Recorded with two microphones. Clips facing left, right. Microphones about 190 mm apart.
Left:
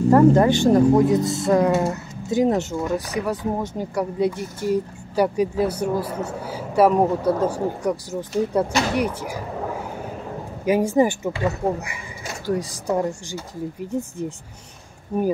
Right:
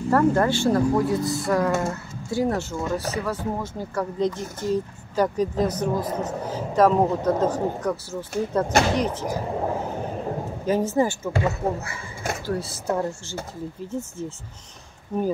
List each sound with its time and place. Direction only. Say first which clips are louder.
0.1 s speech: left 5 dB; 20° left (ahead or behind)
10.6 s speech: left 4 dB; 10° left (ahead or behind)
12.4 s speech: left 5 dB; 15° left (ahead or behind)